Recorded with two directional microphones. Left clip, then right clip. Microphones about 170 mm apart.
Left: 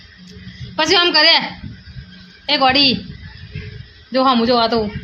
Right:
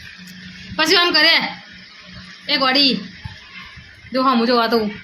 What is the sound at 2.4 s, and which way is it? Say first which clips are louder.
Speech: left 2 dB; 40° left (ahead or behind).